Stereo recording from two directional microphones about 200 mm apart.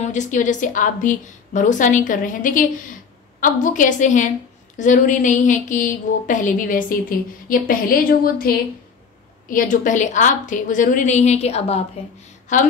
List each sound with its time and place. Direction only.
0.0 s a woman's voice: 35° left (ahead or behind)